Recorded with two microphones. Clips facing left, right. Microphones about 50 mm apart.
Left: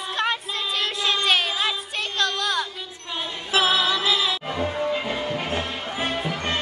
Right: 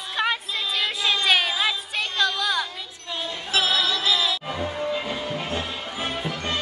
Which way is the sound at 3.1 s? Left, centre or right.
Centre.